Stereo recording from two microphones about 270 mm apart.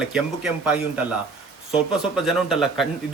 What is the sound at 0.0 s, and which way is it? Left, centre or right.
A man's voice, centre.